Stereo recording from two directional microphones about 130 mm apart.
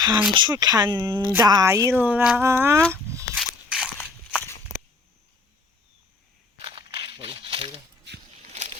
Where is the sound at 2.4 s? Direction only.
20° right (ahead or behind).